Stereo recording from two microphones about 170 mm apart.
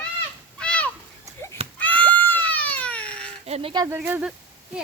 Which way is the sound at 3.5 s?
35° right (ahead or behind).